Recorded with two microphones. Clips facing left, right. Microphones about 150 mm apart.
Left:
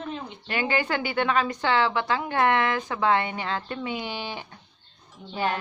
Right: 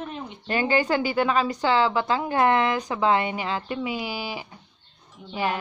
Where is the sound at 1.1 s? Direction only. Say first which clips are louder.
Right 2 dB; 15° right (ahead or behind).